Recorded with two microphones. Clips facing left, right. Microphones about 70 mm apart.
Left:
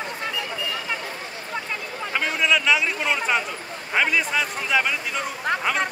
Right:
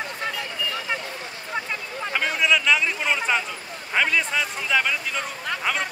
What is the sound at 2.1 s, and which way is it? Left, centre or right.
A man's voice, centre.